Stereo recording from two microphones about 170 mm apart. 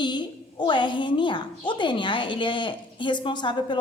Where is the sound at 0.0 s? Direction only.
25° left (ahead or behind).